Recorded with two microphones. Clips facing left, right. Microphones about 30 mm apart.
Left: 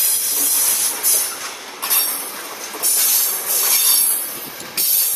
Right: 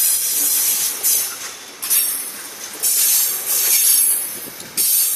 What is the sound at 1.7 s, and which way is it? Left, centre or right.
Train, left.